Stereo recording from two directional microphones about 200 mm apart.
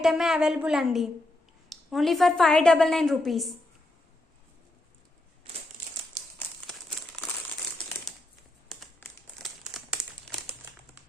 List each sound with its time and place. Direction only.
0.0 s a woman's voice: centre (ahead or behind)
8.7 s crumpling: centre (ahead or behind)